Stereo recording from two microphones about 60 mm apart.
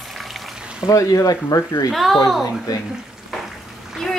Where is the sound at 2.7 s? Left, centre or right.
Left.